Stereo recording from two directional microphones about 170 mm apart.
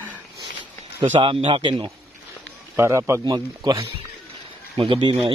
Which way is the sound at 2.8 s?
15° right (ahead or behind).